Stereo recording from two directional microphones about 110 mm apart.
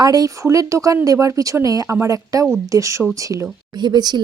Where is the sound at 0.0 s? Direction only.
35° right (ahead or behind).